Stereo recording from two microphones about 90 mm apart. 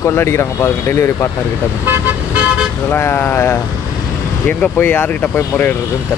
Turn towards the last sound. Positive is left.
turn(degrees=20)  # may be behind; listen again after turning